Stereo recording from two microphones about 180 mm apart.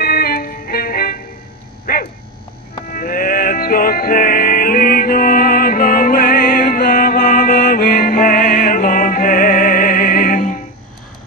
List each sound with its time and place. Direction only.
0.0 s music: 55° left (ahead or behind)
1.9 s dog: 55° left (ahead or behind)
2.9 s music: 50° left (ahead or behind)